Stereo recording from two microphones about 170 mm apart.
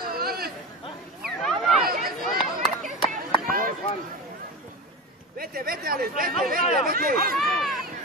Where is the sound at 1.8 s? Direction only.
60° right (ahead or behind).